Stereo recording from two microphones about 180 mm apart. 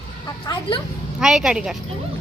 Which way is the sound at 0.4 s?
25° left (ahead or behind).